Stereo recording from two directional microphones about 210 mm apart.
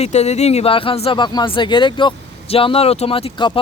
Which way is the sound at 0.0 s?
30° left (ahead or behind).